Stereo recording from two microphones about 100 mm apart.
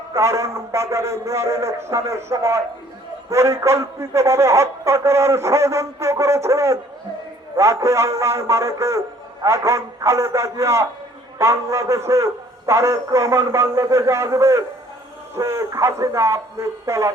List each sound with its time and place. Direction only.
0.1 s a man's voice: 30° right (ahead or behind)